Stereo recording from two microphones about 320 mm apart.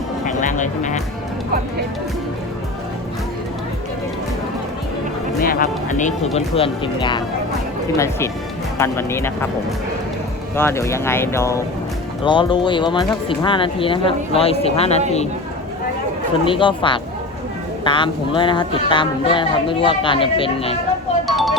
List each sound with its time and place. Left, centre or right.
0.3 s speech: left
5.4 s speech: left; by 9.5 s centre
10.5 s speech: centre
16.5 s speech: centre
21.2 s a sound: centre